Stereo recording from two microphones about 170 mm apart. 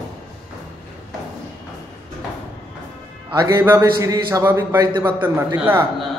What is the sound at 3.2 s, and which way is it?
A man's voice, 15° right (ahead or behind).